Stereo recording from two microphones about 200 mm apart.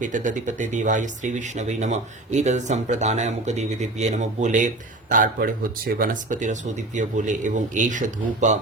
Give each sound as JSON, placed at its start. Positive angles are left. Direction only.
{"t": 0.0, "sound": "speech", "side_deg": -40}